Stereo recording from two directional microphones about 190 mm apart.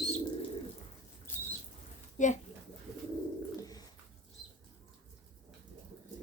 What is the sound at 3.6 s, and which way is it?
Bird, 20° left (ahead or behind).